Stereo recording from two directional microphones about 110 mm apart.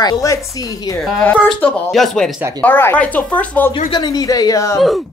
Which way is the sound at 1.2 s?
15° left (ahead or behind).